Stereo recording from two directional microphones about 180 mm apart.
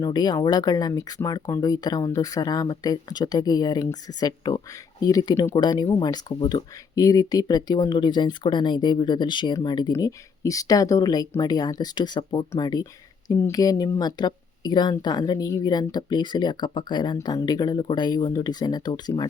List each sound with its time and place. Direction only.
0.0 s speech: 20° left (ahead or behind)